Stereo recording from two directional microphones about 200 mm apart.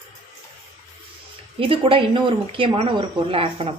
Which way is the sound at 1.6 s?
25° right (ahead or behind).